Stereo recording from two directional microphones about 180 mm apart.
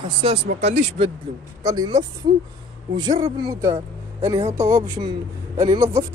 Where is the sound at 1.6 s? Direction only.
20° right (ahead or behind).